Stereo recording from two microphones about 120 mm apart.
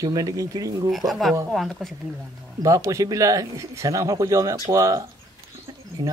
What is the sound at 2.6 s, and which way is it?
Speech, 25° right (ahead or behind).